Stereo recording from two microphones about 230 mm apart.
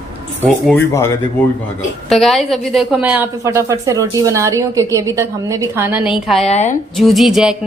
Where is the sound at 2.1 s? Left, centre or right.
Centre.